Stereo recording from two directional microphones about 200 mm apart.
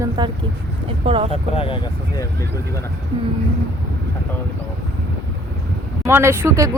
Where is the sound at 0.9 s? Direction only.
30° right (ahead or behind).